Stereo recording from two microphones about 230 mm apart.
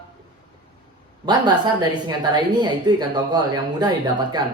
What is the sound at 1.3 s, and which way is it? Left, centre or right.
A woman's voice, centre.